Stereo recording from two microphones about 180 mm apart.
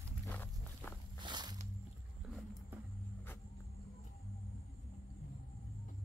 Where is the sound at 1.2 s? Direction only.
25° right (ahead or behind).